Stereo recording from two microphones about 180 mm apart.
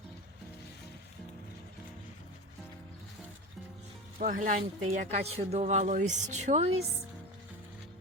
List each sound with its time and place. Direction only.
4.2 s speech: 50° right (ahead or behind)